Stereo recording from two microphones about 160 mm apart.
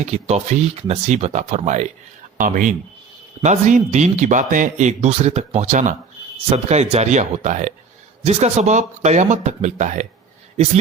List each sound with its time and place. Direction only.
0.0 s speech: 45° right (ahead or behind)